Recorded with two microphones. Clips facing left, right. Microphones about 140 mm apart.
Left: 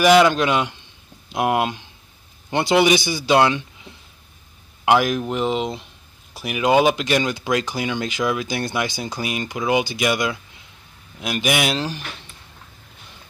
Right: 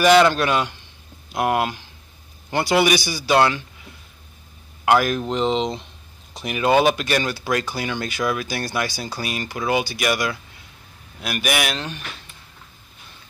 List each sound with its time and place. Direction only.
0.0 s a man's voice: 15° left (ahead or behind); by 12.1 s 30° left (ahead or behind)